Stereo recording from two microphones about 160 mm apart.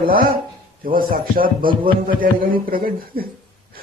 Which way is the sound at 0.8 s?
60° right (ahead or behind).